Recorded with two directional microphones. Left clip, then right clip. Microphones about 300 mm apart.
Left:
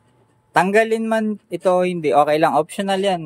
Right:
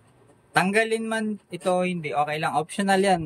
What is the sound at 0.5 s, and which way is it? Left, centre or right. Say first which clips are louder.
A man's voice: left 6 dB; centre.